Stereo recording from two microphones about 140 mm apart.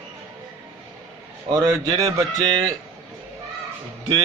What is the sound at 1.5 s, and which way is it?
Speech, 30° right (ahead or behind).